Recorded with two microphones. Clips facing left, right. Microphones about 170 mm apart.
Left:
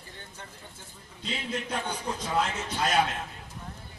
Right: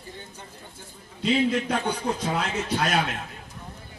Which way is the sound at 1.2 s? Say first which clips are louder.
Right 11 dB; 70° right (ahead or behind).